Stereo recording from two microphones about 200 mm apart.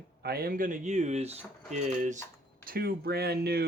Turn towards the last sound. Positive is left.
turn(degrees=-50)  # may be behind; listen again after turning